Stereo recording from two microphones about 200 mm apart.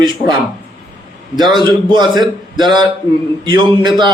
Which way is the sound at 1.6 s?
20° right (ahead or behind).